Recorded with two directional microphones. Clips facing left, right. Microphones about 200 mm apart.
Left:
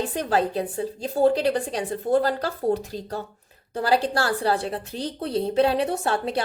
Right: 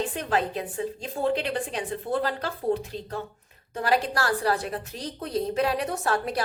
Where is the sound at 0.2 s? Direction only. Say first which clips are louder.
Left 7 dB; 35° left (ahead or behind).